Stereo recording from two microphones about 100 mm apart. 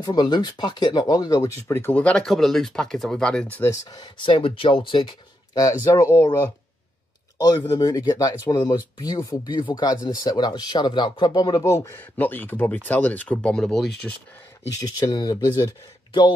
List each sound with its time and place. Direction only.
0.0 s speech: 45° left (ahead or behind); by 2.0 s 25° left (ahead or behind)
2.0 s speech: 10° left (ahead or behind)
3.7 s speech: 35° left (ahead or behind)
4.0 s speech: 55° left (ahead or behind)
5.6 s speech: 35° left (ahead or behind)
7.3 s speech: 45° left (ahead or behind)
9.5 s speech: 50° left (ahead or behind)
11.7 s speech: 25° left (ahead or behind); by 14.1 s 5° left (ahead or behind)
14.8 s speech: 45° left (ahead or behind)